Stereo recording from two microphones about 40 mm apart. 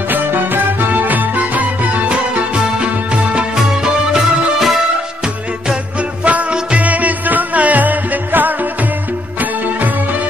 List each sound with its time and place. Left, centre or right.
0.3 s music: right
3.5 s music: centre
5.9 s music: right